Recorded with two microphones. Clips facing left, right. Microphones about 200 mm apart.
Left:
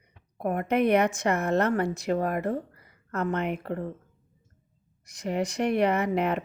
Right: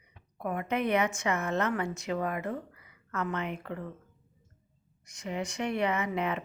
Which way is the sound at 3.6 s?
40° left (ahead or behind).